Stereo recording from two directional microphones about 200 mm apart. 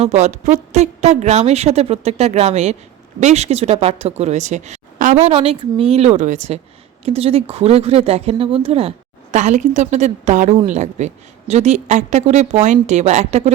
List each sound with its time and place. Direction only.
0.0 s speech: 35° right (ahead or behind)